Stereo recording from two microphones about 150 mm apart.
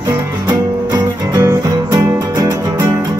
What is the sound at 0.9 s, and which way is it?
Music, 20° right (ahead or behind).